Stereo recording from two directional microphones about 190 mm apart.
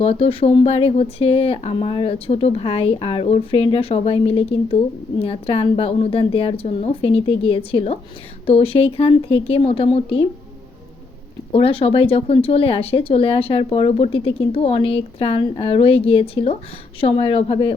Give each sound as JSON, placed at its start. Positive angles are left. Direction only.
{"t": 0.0, "sound": "speech", "side_deg": 30}
{"t": 11.5, "sound": "speech", "side_deg": 30}